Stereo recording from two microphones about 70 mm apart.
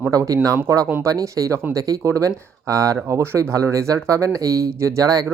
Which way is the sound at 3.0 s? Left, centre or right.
Right.